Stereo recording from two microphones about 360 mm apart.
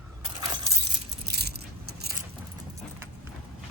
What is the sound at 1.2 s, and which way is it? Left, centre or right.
Keys jangling, right.